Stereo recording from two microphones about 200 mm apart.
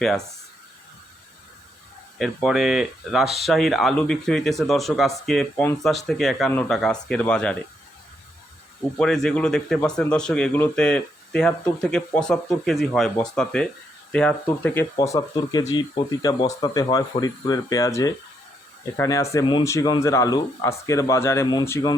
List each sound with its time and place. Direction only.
2.1 s speech: centre (ahead or behind)
9.0 s speech: centre (ahead or behind)